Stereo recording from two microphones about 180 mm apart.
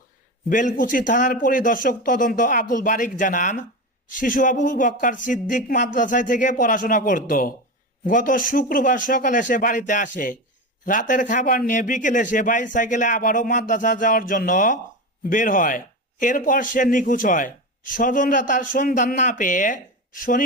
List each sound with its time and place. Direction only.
0.5 s a man's voice: 45° left (ahead or behind)